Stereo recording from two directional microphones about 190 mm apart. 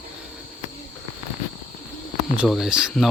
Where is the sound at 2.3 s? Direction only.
5° right (ahead or behind).